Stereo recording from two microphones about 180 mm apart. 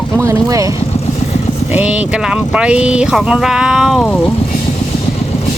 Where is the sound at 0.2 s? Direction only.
15° right (ahead or behind).